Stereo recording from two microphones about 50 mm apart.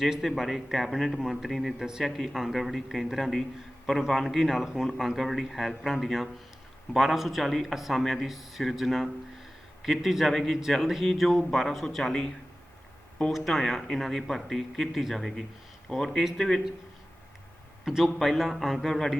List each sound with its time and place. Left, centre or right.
0.0 s speech: centre
13.3 s speech: centre
17.8 s speech: centre